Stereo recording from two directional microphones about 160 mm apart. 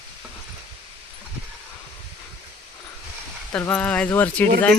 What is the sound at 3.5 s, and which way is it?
Speech, 10° left (ahead or behind).